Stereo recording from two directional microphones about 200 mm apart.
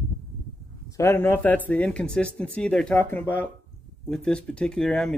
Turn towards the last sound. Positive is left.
turn(degrees=0)  # may be behind; listen again after turning